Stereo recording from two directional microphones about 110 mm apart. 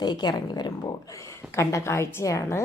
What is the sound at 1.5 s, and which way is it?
Speech, 25° left (ahead or behind).